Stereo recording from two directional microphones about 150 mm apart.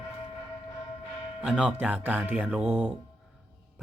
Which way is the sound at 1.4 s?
5° right (ahead or behind).